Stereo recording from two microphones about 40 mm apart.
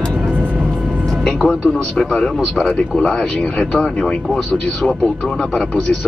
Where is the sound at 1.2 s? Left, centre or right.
Left.